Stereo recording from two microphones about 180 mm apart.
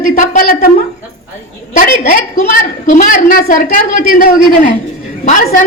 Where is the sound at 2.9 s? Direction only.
50° left (ahead or behind).